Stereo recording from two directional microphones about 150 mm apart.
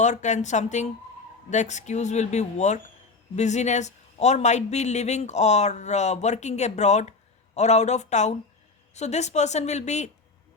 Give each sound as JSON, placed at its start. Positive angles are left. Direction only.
{"t": 0.0, "sound": "a man's voice", "side_deg": 55}